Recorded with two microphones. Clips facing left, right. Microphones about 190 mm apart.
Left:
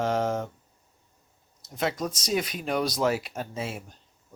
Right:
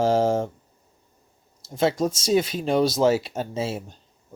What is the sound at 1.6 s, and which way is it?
Speech, 30° right (ahead or behind).